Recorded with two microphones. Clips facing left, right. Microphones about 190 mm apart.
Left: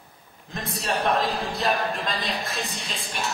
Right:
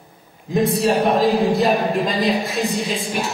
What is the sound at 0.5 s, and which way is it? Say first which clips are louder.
Speech: right 12 dB; centre (ahead or behind).